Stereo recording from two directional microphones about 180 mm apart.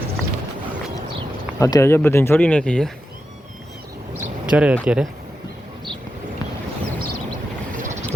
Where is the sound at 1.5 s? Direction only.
15° left (ahead or behind).